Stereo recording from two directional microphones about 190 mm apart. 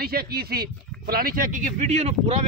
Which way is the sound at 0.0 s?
55° right (ahead or behind).